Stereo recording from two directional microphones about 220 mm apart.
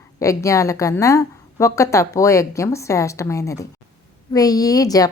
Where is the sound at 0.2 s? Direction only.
15° left (ahead or behind).